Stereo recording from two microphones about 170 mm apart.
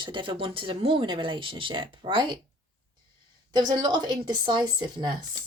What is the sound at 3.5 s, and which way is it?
Speech, 25° right (ahead or behind).